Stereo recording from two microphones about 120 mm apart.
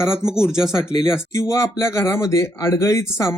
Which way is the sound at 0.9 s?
35° left (ahead or behind).